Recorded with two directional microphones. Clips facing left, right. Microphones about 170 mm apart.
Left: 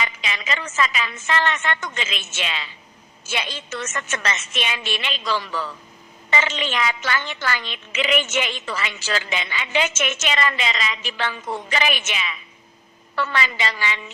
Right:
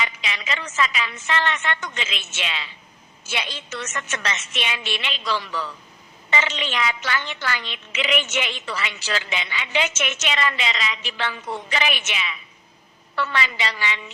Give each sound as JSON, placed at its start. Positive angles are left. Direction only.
{"t": 0.0, "sound": "a woman's voice", "side_deg": 45}